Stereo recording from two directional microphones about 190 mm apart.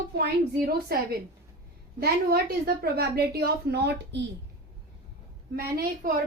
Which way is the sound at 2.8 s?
55° right (ahead or behind).